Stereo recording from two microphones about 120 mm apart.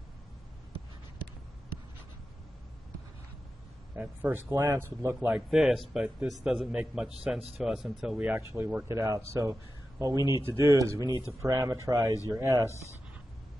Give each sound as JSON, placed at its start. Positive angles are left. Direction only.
{"t": 3.9, "sound": "a man's voice", "side_deg": -15}
{"t": 5.3, "sound": "a man's voice", "side_deg": -5}
{"t": 8.4, "sound": "speech", "side_deg": -20}